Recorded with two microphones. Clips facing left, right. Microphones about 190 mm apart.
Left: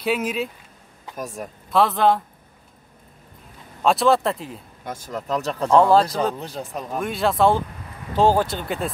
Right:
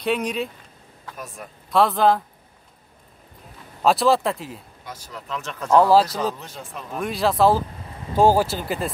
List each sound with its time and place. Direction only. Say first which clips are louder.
0.0 s speech: even; 5° left (ahead or behind)
1.1 s speech: left 7 dB; 45° left (ahead or behind)
1.7 s speech: even; centre (ahead or behind)
3.8 s speech: even; centre (ahead or behind)
4.8 s speech: left 8 dB; 50° left (ahead or behind)
5.7 s speech: even; 5° right (ahead or behind)
6.4 s speech: left 6 dB; 35° left (ahead or behind)
7.0 s speech: even; centre (ahead or behind)